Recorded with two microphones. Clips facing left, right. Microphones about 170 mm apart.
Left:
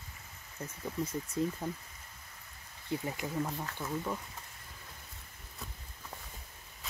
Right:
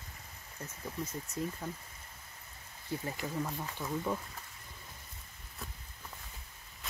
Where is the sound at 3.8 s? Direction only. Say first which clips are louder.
Right 2 dB; centre (ahead or behind).